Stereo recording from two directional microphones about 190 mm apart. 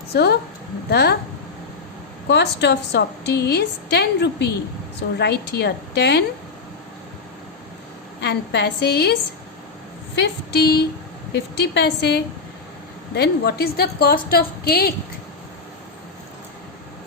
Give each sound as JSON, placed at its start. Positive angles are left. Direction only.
{"t": 0.1, "sound": "a woman's voice", "side_deg": 60}
{"t": 2.2, "sound": "a woman's voice", "side_deg": 60}
{"t": 8.2, "sound": "a woman's voice", "side_deg": 60}
{"t": 10.2, "sound": "a woman's voice", "side_deg": 60}